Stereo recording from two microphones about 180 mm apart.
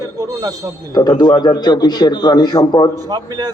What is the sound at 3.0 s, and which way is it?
Speech, 20° right (ahead or behind).